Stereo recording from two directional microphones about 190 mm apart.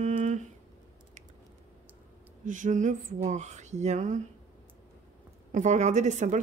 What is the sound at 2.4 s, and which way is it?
Speech, 40° right (ahead or behind).